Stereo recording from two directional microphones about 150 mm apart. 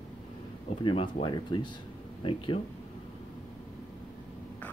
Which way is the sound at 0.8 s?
35° left (ahead or behind).